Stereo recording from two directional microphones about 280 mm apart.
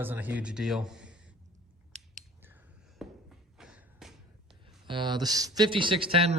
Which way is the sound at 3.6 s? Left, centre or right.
Centre.